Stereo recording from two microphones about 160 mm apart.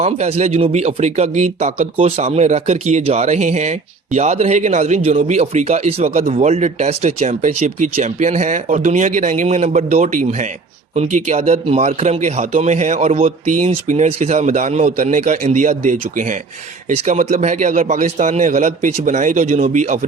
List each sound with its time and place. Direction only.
0.0 s speech: 40° right (ahead or behind)